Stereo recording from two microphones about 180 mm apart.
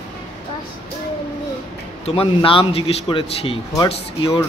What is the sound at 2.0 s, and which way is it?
A man's voice, 30° left (ahead or behind).